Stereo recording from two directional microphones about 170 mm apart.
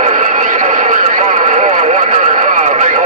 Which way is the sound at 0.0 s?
45° right (ahead or behind).